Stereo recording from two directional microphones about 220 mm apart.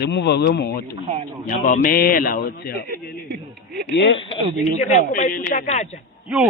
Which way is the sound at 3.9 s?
55° left (ahead or behind).